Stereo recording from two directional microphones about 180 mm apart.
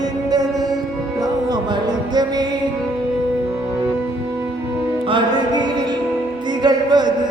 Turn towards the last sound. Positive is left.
turn(degrees=-25)  # may be behind; listen again after turning